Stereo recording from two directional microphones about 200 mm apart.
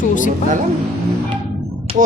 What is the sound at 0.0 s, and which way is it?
Music, 40° left (ahead or behind).